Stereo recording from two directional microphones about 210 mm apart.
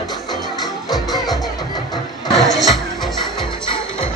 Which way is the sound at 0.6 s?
Centre (ahead or behind).